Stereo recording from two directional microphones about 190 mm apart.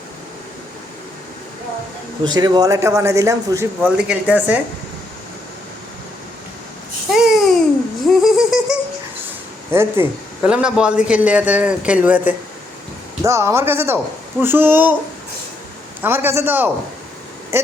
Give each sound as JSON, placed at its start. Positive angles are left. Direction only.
{"t": 2.2, "sound": "a man's voice", "side_deg": -20}
{"t": 7.1, "sound": "babbling", "side_deg": 0}
{"t": 8.1, "sound": "a sound", "side_deg": 0}
{"t": 9.7, "sound": "a man's voice", "side_deg": -10}
{"t": 16.0, "sound": "a man's voice", "side_deg": -10}